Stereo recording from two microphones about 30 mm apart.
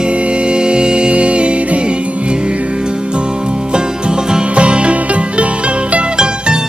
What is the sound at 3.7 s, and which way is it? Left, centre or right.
Music, right.